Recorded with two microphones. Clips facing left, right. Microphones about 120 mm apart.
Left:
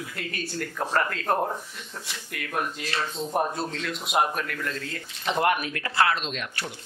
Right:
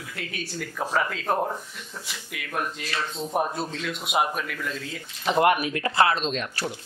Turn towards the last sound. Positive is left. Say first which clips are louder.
# right 5 dB
turn(degrees=-35)  # may be behind; listen again after turning